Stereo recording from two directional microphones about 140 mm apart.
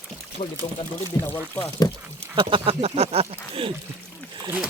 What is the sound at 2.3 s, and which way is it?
Speech, 40° right (ahead or behind).